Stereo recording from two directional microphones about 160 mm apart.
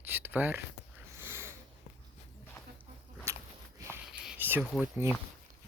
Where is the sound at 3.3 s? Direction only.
15° right (ahead or behind).